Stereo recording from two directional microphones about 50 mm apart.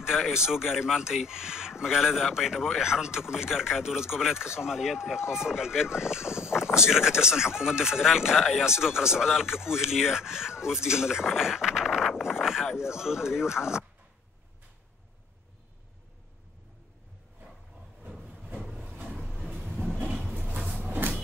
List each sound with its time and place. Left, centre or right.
0.0 s speech: centre
6.4 s a sound: centre
6.8 s speech: centre
8.6 s speech: centre
18.6 s a sound: centre
19.0 s vehicle: centre